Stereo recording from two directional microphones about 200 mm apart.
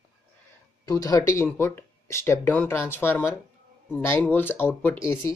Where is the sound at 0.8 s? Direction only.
15° left (ahead or behind).